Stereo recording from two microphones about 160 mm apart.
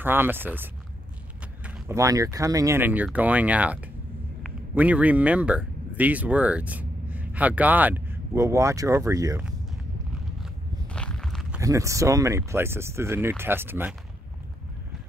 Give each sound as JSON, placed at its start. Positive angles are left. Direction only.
{"t": 0.0, "sound": "speech", "side_deg": -15}
{"t": 10.4, "sound": "a sound", "side_deg": 5}
{"t": 11.6, "sound": "speech", "side_deg": -20}